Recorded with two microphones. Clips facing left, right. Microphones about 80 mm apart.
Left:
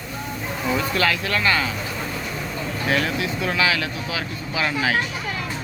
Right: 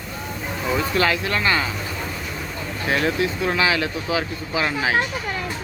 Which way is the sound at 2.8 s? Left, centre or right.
Right.